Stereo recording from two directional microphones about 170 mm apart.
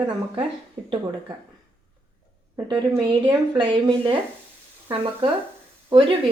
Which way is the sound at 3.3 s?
25° right (ahead or behind).